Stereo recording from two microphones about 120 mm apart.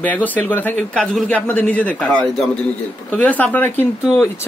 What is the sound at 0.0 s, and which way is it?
Speech, 15° left (ahead or behind).